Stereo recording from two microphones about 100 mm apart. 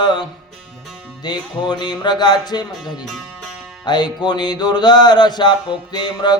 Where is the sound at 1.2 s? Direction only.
45° left (ahead or behind).